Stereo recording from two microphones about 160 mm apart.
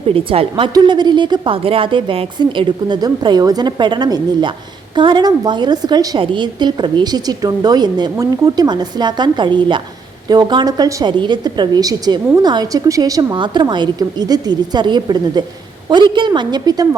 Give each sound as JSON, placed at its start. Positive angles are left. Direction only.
{"t": 0.1, "sound": "a woman's voice", "side_deg": -35}